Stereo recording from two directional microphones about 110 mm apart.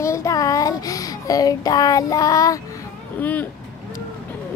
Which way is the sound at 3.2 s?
15° left (ahead or behind).